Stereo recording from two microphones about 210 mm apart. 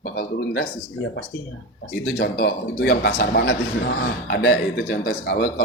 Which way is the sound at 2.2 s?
50° left (ahead or behind).